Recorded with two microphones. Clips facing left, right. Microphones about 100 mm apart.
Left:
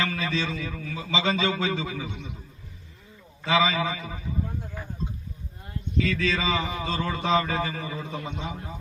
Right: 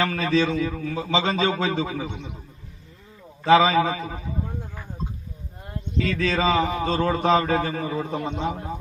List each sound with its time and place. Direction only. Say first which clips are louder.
0.0 s a man's voice: right 6 dB; 40° right (ahead or behind)
3.4 s a man's voice: right 7 dB; 40° right (ahead or behind)
6.0 s a man's voice: right 3 dB; 40° right (ahead or behind)